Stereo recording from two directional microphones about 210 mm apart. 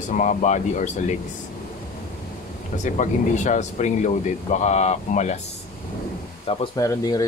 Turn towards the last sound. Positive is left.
turn(degrees=15)  # may be behind; listen again after turning